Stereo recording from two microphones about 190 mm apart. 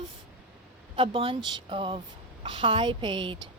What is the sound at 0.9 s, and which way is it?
Speech, 30° right (ahead or behind).